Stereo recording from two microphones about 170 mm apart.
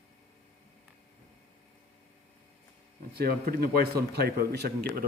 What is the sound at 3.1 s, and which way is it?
Speech, 65° right (ahead or behind).